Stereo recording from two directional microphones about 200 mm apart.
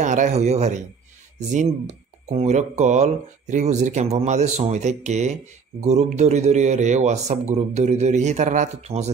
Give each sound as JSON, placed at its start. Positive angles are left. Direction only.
{"t": 0.0, "sound": "a man's voice", "side_deg": -35}
{"t": 2.2, "sound": "a man's voice", "side_deg": -35}